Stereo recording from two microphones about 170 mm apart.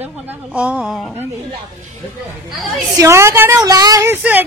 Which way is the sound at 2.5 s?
Centre (ahead or behind).